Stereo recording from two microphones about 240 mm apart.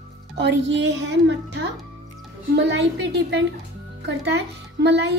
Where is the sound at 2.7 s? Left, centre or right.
Right.